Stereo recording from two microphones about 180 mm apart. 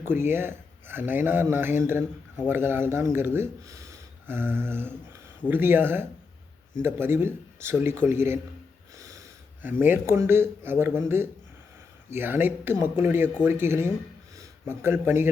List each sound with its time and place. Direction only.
0.0 s speech: 15° right (ahead or behind)
9.0 s a sound: 15° right (ahead or behind)
9.8 s speech: 10° right (ahead or behind)